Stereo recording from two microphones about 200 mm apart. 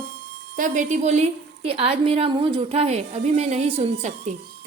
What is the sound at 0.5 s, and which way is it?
A woman's voice, 40° right (ahead or behind).